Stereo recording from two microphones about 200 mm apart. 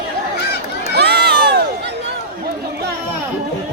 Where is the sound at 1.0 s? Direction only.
55° right (ahead or behind).